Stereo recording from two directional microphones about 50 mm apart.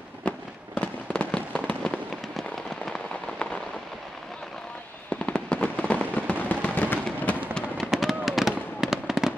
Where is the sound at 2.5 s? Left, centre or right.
Centre.